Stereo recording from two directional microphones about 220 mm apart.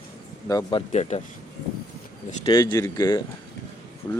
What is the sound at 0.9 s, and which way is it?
Speech, 30° left (ahead or behind).